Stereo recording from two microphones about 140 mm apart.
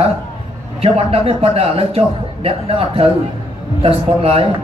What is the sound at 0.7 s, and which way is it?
A man's voice, 45° right (ahead or behind).